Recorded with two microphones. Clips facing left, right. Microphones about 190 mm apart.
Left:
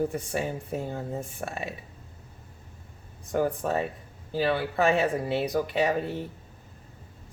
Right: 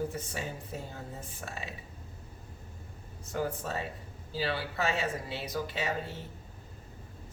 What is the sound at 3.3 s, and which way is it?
Speech, 60° left (ahead or behind).